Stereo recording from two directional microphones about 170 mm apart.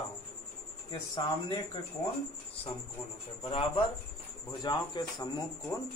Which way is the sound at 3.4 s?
35° left (ahead or behind).